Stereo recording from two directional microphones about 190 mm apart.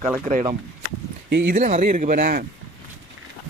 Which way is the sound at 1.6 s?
40° right (ahead or behind).